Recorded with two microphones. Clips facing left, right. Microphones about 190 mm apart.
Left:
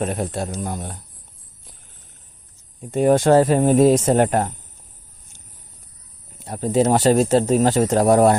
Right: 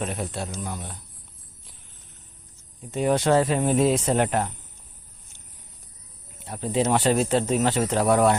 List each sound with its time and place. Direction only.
0.0 s speech: 45° left (ahead or behind)
2.9 s speech: 45° left (ahead or behind)
6.4 s speech: 45° left (ahead or behind)